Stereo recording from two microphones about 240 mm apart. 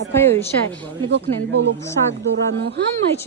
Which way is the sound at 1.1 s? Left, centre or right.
Right.